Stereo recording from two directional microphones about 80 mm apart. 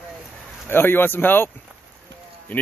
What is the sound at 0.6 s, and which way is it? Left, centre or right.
Speech, left.